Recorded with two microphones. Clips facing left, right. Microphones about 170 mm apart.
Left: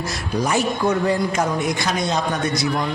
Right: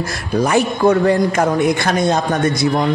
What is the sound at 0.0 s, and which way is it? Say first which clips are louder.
A man's voice: right 5 dB; 55° right (ahead or behind).